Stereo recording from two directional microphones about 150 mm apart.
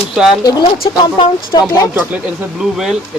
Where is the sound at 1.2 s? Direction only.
25° left (ahead or behind).